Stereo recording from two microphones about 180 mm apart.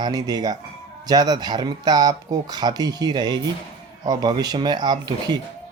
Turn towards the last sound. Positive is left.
turn(degrees=-25)  # may be behind; listen again after turning